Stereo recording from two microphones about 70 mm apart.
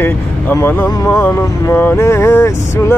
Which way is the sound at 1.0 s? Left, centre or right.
Left.